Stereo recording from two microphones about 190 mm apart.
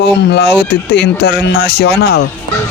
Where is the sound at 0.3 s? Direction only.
60° left (ahead or behind).